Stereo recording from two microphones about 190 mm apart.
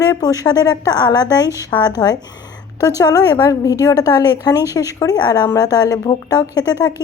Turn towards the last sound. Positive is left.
turn(degrees=20)  # may be behind; listen again after turning